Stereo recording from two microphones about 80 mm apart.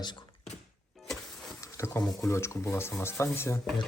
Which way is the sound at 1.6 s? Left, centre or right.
Left.